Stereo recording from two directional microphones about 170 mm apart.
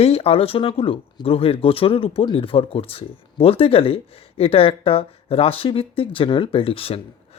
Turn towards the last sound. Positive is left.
turn(degrees=35)  # may be behind; listen again after turning